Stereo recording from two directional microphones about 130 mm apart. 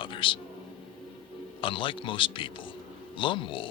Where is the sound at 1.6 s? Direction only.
40° left (ahead or behind).